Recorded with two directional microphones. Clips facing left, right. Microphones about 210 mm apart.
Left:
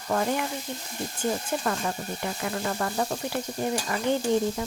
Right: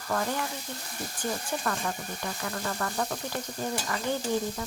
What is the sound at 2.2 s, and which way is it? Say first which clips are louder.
Stir: left 4 dB; 20° left (ahead or behind).